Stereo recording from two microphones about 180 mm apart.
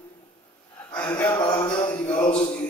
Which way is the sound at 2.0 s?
10° left (ahead or behind).